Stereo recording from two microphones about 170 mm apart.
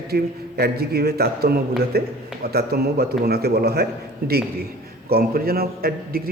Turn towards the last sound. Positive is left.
turn(degrees=-65)  # may be behind; listen again after turning